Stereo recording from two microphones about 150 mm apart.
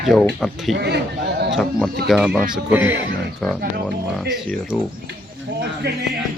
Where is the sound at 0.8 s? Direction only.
90° right.